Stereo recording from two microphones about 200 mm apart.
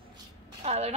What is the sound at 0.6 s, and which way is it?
Speech, 35° right (ahead or behind).